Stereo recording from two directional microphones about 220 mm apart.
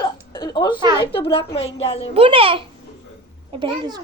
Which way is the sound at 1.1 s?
25° left (ahead or behind).